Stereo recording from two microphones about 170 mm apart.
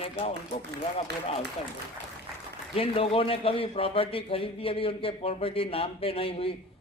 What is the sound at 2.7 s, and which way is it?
A man's voice, 35° left (ahead or behind).